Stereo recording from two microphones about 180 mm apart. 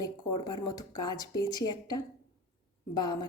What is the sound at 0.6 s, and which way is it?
A woman's voice, 20° left (ahead or behind).